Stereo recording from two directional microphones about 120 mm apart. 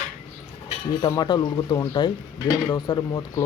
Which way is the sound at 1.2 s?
35° left (ahead or behind).